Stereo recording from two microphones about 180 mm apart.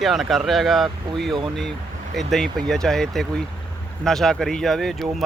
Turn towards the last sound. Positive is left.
turn(degrees=0)  # may be behind; listen again after turning